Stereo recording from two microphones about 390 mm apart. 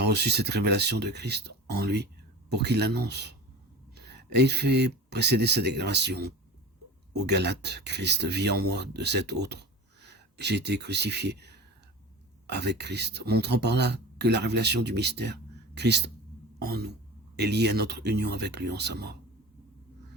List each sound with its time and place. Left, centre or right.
0.0 s speech: right